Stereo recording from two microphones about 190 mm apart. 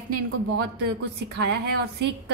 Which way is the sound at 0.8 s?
60° right (ahead or behind).